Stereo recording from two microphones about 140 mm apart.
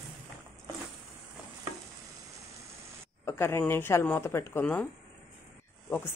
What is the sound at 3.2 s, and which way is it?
Speech, 20° left (ahead or behind).